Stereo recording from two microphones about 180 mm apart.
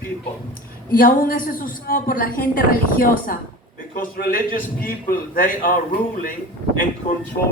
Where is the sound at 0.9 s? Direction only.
50° left (ahead or behind).